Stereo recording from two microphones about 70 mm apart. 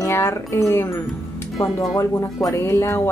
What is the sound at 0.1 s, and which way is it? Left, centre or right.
Speech, left.